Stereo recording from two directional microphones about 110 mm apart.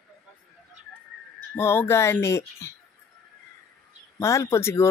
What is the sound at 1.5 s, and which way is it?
Speech, 20° left (ahead or behind).